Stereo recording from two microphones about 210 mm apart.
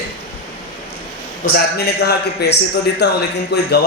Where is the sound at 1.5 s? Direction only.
50° left (ahead or behind).